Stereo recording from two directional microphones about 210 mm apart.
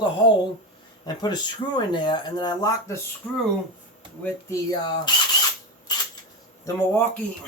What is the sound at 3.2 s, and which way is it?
Speech, 5° left (ahead or behind).